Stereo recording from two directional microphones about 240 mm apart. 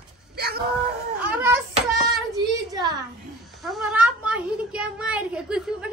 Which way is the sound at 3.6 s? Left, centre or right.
Centre.